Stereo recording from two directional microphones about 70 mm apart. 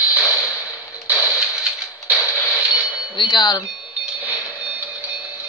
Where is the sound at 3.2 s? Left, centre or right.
Left.